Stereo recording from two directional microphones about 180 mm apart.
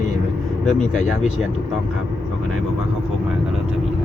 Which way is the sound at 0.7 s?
45° left (ahead or behind).